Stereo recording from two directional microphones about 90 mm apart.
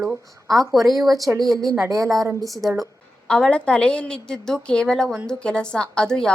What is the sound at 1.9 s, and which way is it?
Speech, 40° right (ahead or behind).